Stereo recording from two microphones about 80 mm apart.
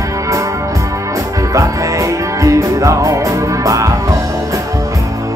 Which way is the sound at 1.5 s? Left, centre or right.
Right.